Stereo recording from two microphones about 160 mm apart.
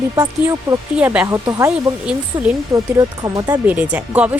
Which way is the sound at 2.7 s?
20° right (ahead or behind).